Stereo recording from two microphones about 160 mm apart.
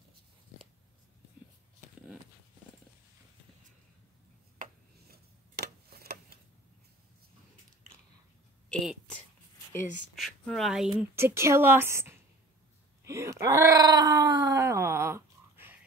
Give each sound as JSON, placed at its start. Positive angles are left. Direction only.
{"t": 4.6, "sound": "a sound", "side_deg": -75}
{"t": 10.1, "sound": "speech", "side_deg": 0}
{"t": 11.1, "sound": "a woman's voice", "side_deg": -15}
{"t": 13.0, "sound": "wail", "side_deg": -20}